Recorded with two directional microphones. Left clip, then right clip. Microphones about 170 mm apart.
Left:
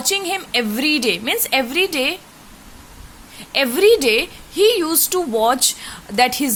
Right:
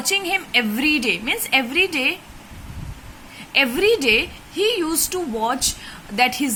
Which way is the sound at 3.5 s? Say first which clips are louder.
Left 3 dB; 40° left (ahead or behind).